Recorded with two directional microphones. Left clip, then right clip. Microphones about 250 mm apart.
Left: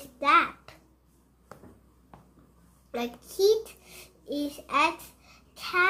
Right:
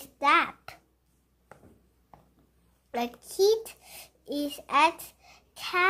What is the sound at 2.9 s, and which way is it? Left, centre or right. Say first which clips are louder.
A child's voice: right 2 dB; right.